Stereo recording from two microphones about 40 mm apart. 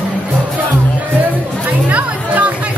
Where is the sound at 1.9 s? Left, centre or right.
Right.